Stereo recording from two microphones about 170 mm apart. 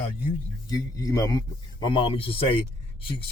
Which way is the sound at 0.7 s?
20° left (ahead or behind).